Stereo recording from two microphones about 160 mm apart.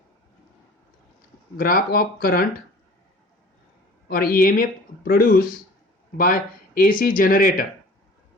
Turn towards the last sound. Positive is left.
turn(degrees=60)  # may be behind; listen again after turning